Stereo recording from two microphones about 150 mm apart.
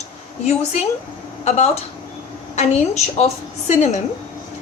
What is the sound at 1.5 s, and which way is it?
A woman's voice, 45° left (ahead or behind).